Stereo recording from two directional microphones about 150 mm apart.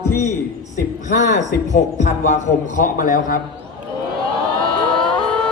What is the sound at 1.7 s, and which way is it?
Speech, 50° left (ahead or behind).